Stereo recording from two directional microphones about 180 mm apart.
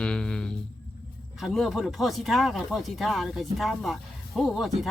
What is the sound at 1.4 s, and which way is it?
Speech, centre (ahead or behind).